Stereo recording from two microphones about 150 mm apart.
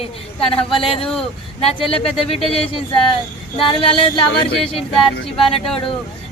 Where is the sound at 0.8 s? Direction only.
40° left (ahead or behind).